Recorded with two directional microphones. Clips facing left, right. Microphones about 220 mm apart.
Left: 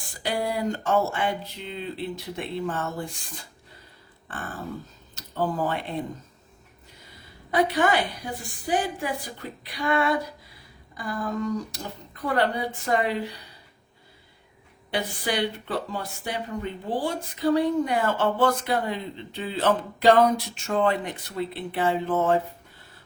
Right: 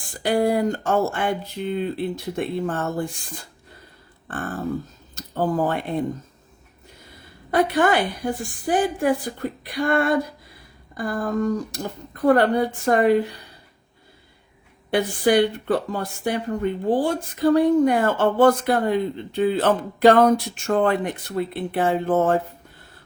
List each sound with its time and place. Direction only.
0.2 s speech: 50° right (ahead or behind)
5.1 s a sound: 50° right (ahead or behind)
7.5 s speech: 50° right (ahead or behind)
14.8 s speech: 50° right (ahead or behind)